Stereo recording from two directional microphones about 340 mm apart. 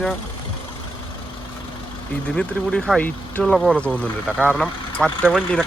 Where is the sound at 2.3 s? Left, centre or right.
Centre.